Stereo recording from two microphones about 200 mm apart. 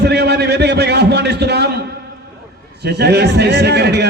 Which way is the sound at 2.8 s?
55° right (ahead or behind).